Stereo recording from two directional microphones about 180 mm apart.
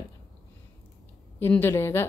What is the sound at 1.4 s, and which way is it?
Speech, 10° left (ahead or behind).